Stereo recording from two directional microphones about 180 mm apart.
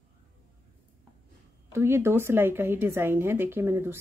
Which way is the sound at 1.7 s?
15° right (ahead or behind).